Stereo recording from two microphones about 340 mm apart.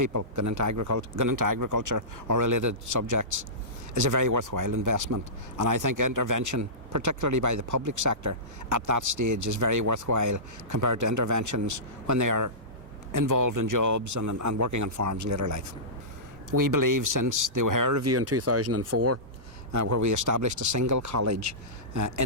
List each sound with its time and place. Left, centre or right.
0.0 s a man's voice: right
16.5 s a man's voice: right